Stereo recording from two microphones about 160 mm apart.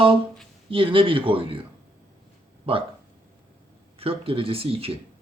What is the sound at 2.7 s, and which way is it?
Speech, 35° right (ahead or behind).